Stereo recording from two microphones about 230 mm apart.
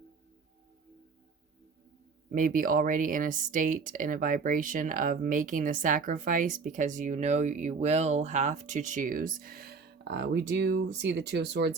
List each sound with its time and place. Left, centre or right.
2.3 s speech: right